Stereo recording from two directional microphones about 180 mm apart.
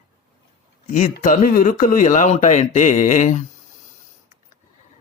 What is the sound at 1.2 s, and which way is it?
Speech, 50° left (ahead or behind).